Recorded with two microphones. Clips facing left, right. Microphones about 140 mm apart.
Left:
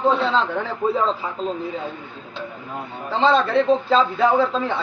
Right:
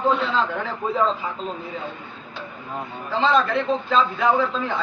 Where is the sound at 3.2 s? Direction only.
30° left (ahead or behind).